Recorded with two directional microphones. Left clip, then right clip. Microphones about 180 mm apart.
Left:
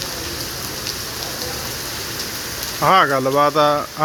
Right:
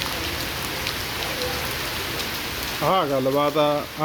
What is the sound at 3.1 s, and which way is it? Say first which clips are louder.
Speech: left 4 dB; 10° left (ahead or behind).